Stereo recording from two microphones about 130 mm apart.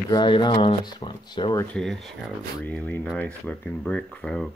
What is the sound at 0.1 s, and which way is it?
Speech, 35° left (ahead or behind).